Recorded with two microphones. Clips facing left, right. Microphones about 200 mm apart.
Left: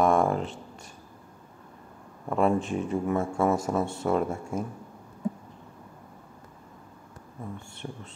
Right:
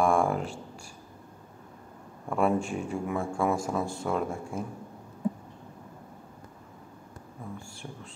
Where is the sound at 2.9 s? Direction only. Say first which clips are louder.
Left 4 dB; centre (ahead or behind).